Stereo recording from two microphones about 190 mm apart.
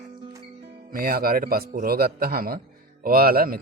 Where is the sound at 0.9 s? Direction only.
50° right (ahead or behind).